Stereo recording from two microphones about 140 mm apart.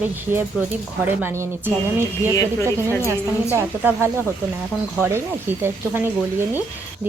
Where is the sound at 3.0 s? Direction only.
15° right (ahead or behind).